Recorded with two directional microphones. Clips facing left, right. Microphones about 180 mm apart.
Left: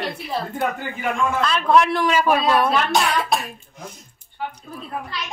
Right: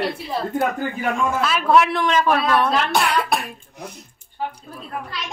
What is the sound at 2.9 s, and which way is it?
Speech, 60° right (ahead or behind).